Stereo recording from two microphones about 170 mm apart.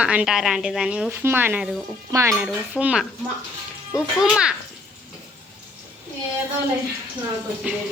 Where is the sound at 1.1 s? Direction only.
15° right (ahead or behind).